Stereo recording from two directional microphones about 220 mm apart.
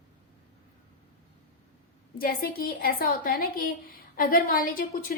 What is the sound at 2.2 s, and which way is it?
A woman's voice, 40° left (ahead or behind).